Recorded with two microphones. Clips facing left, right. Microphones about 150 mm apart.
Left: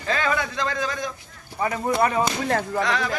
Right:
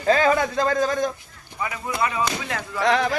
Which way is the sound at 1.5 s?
40° left (ahead or behind).